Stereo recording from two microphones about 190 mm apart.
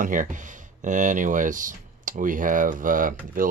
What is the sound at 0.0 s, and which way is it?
Speech, 45° right (ahead or behind).